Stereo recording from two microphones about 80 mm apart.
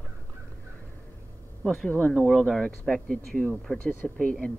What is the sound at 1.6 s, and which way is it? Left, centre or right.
Speech, centre.